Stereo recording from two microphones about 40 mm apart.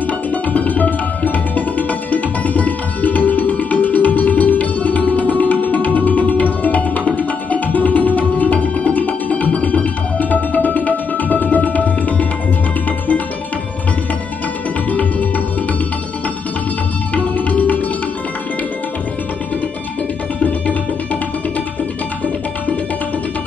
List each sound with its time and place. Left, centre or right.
0.3 s tabla: left
5.9 s music: left
14.9 s music: left
17.1 s tabla: left